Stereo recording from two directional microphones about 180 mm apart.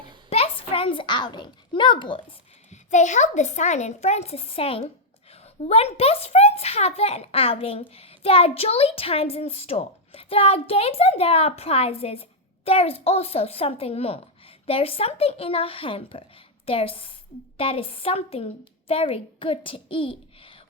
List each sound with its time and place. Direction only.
0.3 s a child's voice: 35° left (ahead or behind)
2.6 s a woman's voice: 40° left (ahead or behind)